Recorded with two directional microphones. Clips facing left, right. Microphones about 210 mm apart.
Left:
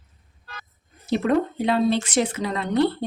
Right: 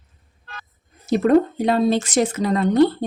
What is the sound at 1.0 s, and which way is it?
Speech, 45° right (ahead or behind).